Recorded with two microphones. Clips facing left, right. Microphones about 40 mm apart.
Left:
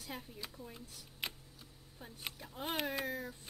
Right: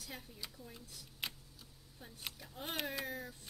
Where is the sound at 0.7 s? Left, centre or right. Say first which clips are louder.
Left 2 dB; centre.